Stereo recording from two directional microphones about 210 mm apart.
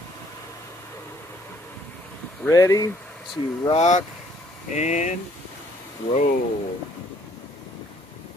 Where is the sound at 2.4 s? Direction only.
15° left (ahead or behind).